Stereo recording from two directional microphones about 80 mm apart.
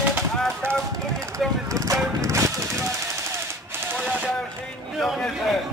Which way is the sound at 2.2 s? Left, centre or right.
Right.